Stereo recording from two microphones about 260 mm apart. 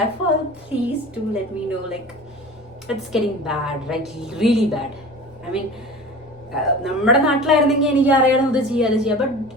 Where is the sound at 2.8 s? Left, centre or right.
Centre.